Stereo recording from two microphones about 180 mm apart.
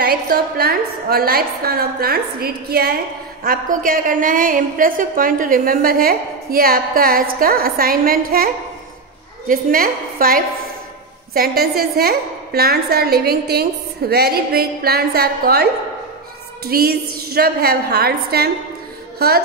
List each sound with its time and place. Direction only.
0.0 s a woman's voice: 60° right (ahead or behind)
9.5 s a woman's voice: 50° right (ahead or behind)
19.1 s music: 60° right (ahead or behind)